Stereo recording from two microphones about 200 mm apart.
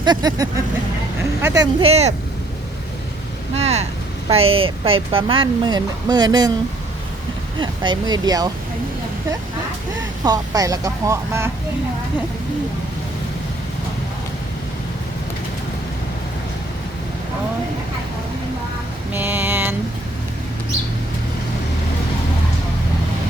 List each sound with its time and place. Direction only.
0.0 s speech: 20° right (ahead or behind)
1.8 s speech: 30° right (ahead or behind)
3.5 s speech: 35° right (ahead or behind)
7.6 s speech: 20° right (ahead or behind)
10.2 s speech: 20° right (ahead or behind)
19.1 s music: 10° right (ahead or behind)